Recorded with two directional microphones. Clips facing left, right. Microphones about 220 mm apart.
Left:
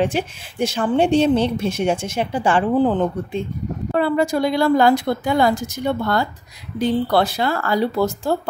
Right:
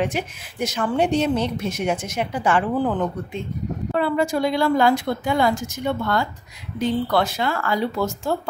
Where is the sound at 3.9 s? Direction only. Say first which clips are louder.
Left 3 dB; 40° left (ahead or behind).